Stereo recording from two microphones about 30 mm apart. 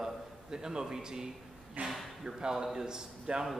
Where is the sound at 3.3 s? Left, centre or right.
Right.